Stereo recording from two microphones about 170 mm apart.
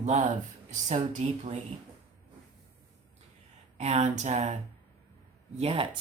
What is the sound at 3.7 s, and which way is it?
Speech, 40° right (ahead or behind).